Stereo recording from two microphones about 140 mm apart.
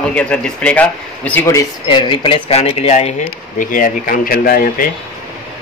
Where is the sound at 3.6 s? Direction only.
75° left (ahead or behind); by 4.9 s 90° left.